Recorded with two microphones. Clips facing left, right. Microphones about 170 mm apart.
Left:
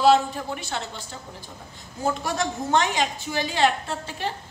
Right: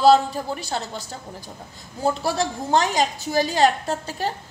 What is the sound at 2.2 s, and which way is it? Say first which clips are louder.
A woman's voice: right 3 dB; 35° right (ahead or behind).